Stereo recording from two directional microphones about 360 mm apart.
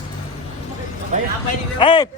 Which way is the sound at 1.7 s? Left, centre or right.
Centre.